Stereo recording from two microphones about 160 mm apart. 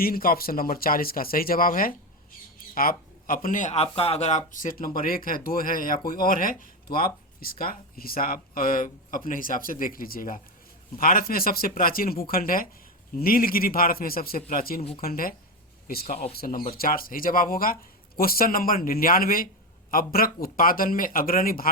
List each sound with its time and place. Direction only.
0.0 s speech: 65° left (ahead or behind)
16.4 s speech: 60° left (ahead or behind)